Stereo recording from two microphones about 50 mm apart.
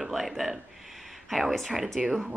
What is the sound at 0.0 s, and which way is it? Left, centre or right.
Speech, centre.